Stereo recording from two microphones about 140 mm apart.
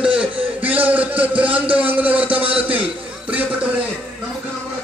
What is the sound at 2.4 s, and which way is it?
Speech, 40° right (ahead or behind).